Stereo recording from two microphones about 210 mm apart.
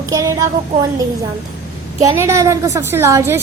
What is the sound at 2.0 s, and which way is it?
A woman's voice, 15° right (ahead or behind).